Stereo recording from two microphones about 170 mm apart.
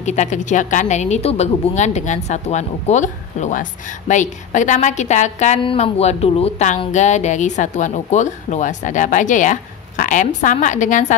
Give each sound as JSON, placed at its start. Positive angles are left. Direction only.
{"t": 0.0, "sound": "speech", "side_deg": 45}
{"t": 5.6, "sound": "speech", "side_deg": 35}